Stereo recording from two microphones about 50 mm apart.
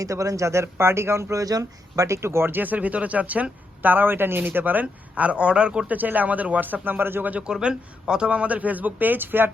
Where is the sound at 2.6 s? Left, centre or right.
Right.